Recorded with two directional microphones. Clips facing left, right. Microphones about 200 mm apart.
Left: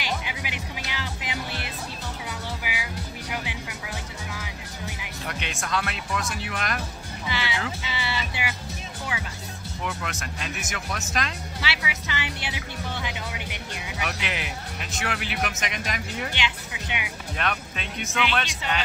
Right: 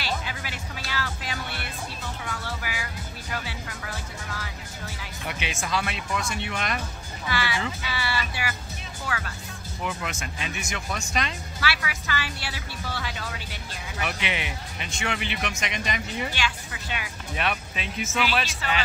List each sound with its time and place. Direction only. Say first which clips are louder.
0.0 s music: even; 15° left (ahead or behind)
5.2 s speech: right 1 dB; centre (ahead or behind)
7.2 s a woman's voice: right 1 dB; 20° left (ahead or behind)
9.8 s speech: right 1 dB; centre (ahead or behind)
11.6 s a woman's voice: right 2 dB; 20° left (ahead or behind)
14.0 s speech: right 2 dB; centre (ahead or behind)
16.3 s speech: even; 20° left (ahead or behind)
17.4 s speech: right 1 dB; 5° right (ahead or behind)